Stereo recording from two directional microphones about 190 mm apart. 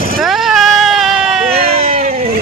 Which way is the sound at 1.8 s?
35° right (ahead or behind).